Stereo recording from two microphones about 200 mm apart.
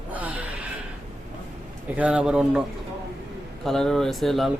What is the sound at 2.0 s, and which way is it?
A man's voice, 5° right (ahead or behind).